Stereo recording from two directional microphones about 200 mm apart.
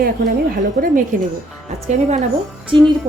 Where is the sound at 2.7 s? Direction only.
25° right (ahead or behind).